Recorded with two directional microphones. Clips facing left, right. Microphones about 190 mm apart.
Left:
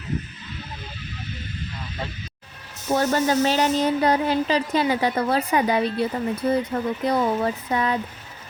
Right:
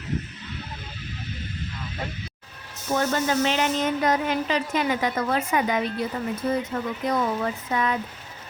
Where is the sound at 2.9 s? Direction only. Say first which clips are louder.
Left 3 dB; 35° left (ahead or behind).